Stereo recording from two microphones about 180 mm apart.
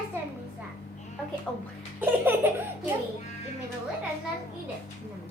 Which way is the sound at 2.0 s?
10° right (ahead or behind).